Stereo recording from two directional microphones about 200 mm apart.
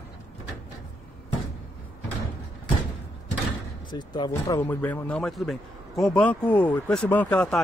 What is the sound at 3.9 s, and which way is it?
Speech, 20° left (ahead or behind).